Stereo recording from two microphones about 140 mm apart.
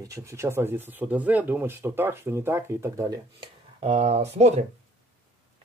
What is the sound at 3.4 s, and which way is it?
Speech, 50° right (ahead or behind).